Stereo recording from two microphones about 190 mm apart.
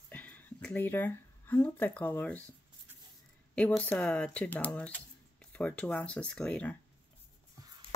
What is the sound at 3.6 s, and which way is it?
Speech, 10° left (ahead or behind).